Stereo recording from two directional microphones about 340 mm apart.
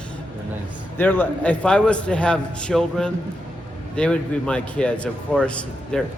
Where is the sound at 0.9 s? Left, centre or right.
Centre.